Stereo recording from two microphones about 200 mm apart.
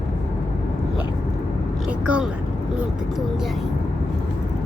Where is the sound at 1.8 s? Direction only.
5° right (ahead or behind).